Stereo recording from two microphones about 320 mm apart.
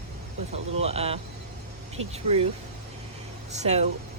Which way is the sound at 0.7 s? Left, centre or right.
Centre.